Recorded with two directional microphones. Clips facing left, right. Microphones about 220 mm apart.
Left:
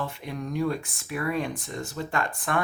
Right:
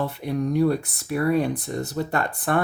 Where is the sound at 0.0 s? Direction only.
35° right (ahead or behind).